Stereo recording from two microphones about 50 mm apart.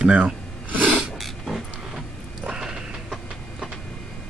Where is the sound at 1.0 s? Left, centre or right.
Centre.